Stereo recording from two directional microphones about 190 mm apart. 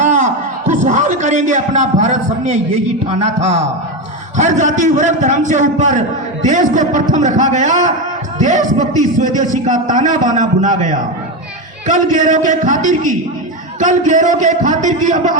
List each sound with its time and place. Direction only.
0.0 s a man's voice: 40° right (ahead or behind)